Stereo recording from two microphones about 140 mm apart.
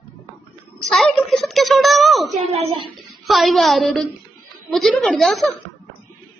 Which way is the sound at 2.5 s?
45° right (ahead or behind).